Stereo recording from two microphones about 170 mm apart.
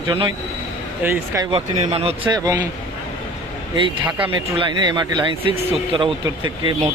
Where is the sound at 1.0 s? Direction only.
15° right (ahead or behind).